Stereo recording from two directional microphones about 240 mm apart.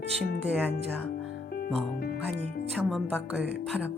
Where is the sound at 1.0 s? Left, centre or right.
Left.